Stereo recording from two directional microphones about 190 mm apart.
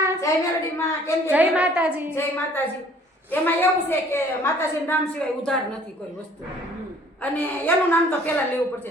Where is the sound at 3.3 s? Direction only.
10° left (ahead or behind).